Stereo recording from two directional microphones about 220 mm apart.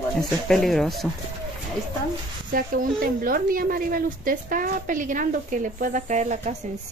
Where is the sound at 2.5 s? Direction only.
40° right (ahead or behind).